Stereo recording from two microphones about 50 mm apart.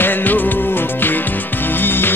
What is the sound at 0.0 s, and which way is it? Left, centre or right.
Music, left.